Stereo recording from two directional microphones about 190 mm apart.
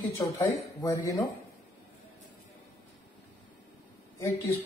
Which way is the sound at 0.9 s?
15° left (ahead or behind).